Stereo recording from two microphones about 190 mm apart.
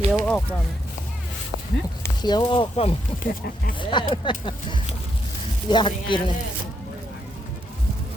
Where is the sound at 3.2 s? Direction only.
50° left (ahead or behind).